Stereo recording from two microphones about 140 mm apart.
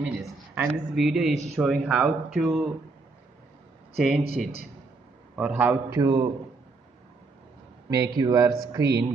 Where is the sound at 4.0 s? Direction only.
5° right (ahead or behind).